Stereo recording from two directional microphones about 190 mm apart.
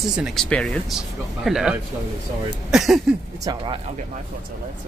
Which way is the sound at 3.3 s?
20° right (ahead or behind).